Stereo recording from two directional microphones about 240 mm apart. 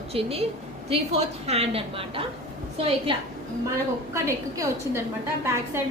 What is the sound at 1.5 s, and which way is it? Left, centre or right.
A woman's voice, right.